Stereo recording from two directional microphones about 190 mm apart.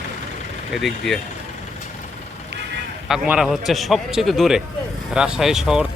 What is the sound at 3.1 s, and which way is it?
Speech, 5° right (ahead or behind).